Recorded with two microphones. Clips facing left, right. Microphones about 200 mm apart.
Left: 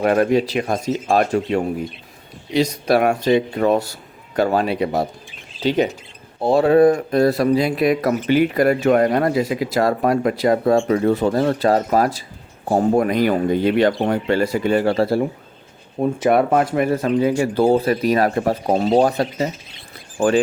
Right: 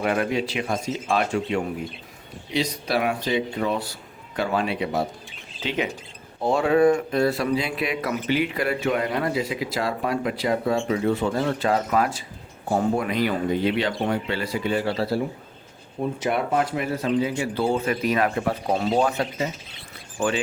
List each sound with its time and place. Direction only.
0.0 s speech: 45° left (ahead or behind)